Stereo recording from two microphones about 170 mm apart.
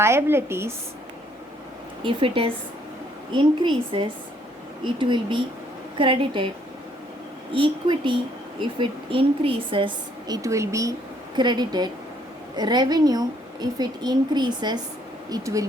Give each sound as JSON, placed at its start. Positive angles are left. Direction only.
{"t": 0.0, "sound": "a woman's voice", "side_deg": -15}
{"t": 2.0, "sound": "a woman's voice", "side_deg": -30}
{"t": 7.5, "sound": "a woman's voice", "side_deg": -30}